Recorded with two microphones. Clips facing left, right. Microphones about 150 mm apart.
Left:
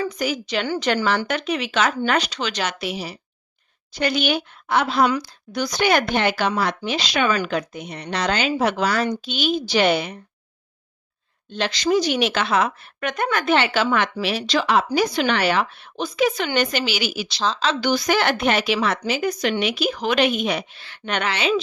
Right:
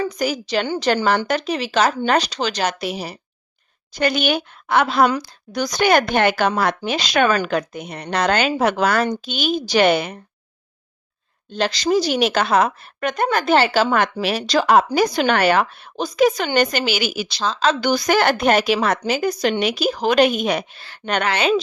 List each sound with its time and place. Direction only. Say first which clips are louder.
0.0 s a woman's voice: right 2 dB; 40° right (ahead or behind); by 5.2 s 55° right (ahead or behind)
5.5 s a woman's voice: right 3 dB; 40° right (ahead or behind)
11.5 s a woman's voice: right 2 dB; 40° right (ahead or behind)